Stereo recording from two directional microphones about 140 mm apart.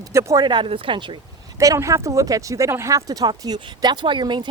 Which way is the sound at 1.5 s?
25° right (ahead or behind).